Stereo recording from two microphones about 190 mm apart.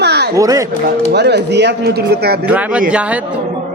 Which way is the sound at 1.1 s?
60° right (ahead or behind).